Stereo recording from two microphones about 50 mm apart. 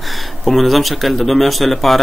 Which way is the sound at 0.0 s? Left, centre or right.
Centre.